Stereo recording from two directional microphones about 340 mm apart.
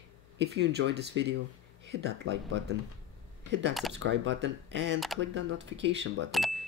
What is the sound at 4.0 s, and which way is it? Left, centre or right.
Speech, right.